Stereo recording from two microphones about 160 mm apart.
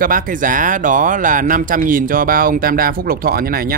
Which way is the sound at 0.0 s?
60° right (ahead or behind).